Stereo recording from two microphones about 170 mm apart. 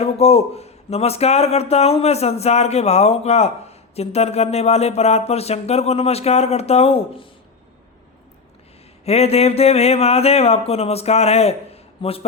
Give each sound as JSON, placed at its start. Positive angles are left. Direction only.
{"t": 0.0, "sound": "speech", "side_deg": 35}
{"t": 9.0, "sound": "speech", "side_deg": 35}